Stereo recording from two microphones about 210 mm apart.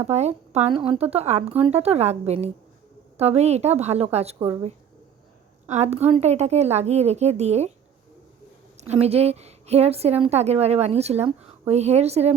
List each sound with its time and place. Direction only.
0.0 s a woman's voice: 30° right (ahead or behind)
8.8 s a woman's voice: 30° right (ahead or behind)